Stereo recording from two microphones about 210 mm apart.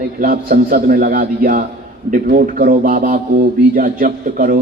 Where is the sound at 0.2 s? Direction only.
45° right (ahead or behind).